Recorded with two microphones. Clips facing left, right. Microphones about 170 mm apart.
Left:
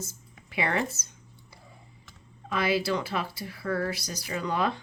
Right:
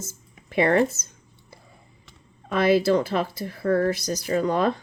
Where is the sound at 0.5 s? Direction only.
45° right (ahead or behind).